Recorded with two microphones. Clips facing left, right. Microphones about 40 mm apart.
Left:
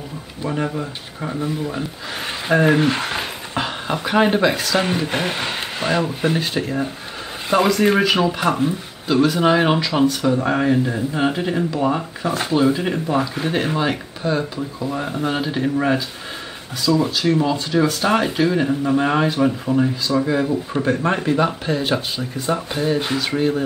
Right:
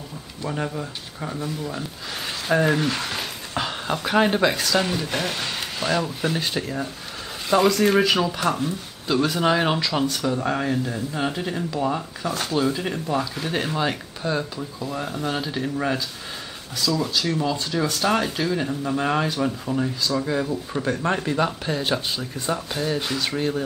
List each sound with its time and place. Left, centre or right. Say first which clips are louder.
0.4 s speech: left 4 dB; centre
4.7 s speech: left 3 dB; left
9.0 s speech: left 5 dB; centre